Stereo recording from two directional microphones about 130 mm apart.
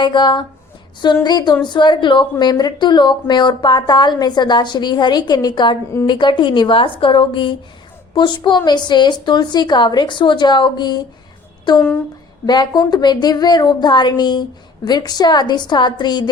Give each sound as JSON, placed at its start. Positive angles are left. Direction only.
{"t": 0.0, "sound": "speech", "side_deg": 35}